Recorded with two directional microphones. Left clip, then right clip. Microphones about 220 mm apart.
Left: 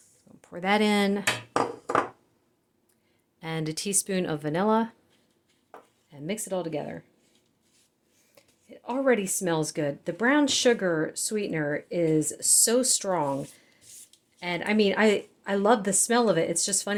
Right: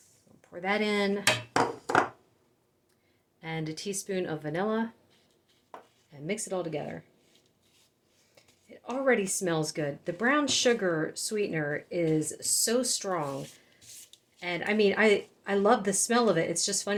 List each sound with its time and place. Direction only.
0.4 s speech: 50° left (ahead or behind)
3.4 s speech: 50° left (ahead or behind)
6.1 s speech: 30° left (ahead or behind)
8.4 s speech: 30° left (ahead or behind)
13.9 s a sound: 5° left (ahead or behind)
14.3 s speech: 40° left (ahead or behind)